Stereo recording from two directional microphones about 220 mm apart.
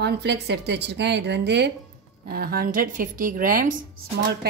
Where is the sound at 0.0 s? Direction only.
50° right (ahead or behind).